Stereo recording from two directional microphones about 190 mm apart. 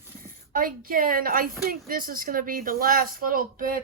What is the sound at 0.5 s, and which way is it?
Speech, 50° right (ahead or behind).